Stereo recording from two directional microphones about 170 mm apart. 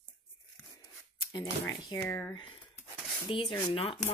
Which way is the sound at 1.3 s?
20° left (ahead or behind).